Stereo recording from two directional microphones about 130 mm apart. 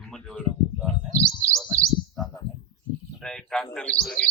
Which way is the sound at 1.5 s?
5° left (ahead or behind).